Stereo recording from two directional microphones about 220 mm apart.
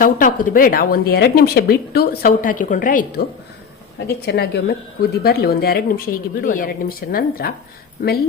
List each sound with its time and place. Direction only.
0.0 s a woman's voice: 40° left (ahead or behind)